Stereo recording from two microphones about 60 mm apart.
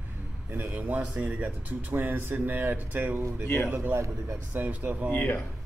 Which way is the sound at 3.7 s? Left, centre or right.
Right.